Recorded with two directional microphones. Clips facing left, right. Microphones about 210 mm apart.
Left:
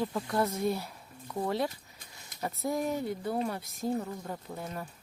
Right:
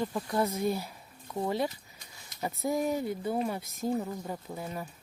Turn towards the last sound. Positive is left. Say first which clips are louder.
# right 1 dB
turn(degrees=-5)  # may be behind; listen again after turning